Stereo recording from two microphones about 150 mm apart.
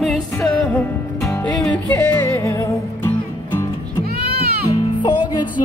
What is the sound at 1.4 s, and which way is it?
Music, 10° left (ahead or behind).